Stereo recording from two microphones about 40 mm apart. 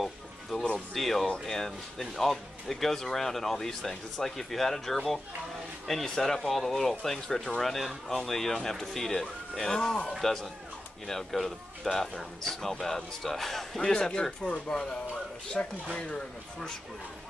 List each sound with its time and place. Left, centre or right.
0.0 s music: centre
0.9 s speech: centre
13.7 s speech: centre
15.6 s speech: left